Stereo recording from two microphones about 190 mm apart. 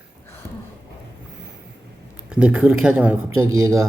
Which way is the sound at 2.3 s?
5° right (ahead or behind).